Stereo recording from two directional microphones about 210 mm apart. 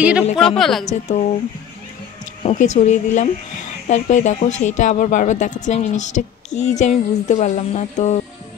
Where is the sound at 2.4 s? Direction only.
35° left (ahead or behind).